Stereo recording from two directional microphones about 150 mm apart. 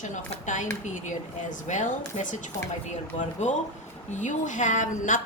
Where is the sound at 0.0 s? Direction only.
55° left (ahead or behind).